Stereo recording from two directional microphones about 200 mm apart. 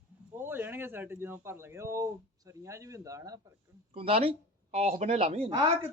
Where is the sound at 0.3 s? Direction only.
10° right (ahead or behind).